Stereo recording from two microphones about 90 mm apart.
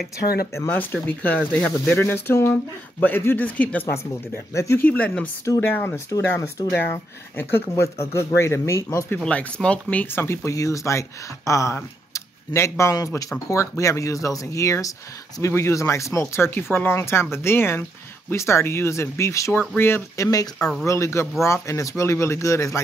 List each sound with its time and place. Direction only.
1.0 s speech: 20° left (ahead or behind)
4.6 s speech: 30° left (ahead or behind)
4.8 s speech: 15° left (ahead or behind)
5.6 s speech: 25° left (ahead or behind)
9.2 s speech: 15° left (ahead or behind)
10.1 s speech: 30° left (ahead or behind)
20.5 s speech: 10° left (ahead or behind)
20.8 s speech: 30° left (ahead or behind)